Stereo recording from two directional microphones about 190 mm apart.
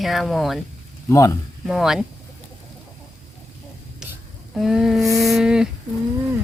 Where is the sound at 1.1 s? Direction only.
20° left (ahead or behind).